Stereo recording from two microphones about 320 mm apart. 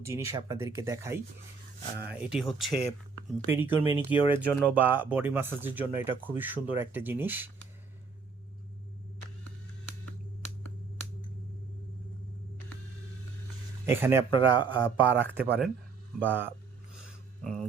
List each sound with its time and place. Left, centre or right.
0.0 s speech: centre
4.1 s speech: centre
4.4 s speech: centre
13.8 s speech: centre
14.3 s speech: centre
14.7 s speech: centre